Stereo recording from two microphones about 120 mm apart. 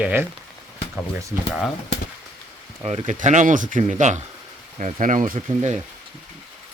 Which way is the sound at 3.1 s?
90° right.